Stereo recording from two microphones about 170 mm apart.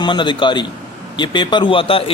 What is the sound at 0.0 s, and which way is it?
Speech, 30° left (ahead or behind).